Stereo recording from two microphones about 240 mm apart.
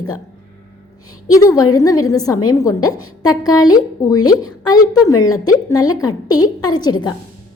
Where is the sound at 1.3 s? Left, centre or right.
Centre.